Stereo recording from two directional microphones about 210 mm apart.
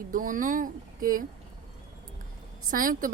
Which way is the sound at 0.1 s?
40° right (ahead or behind).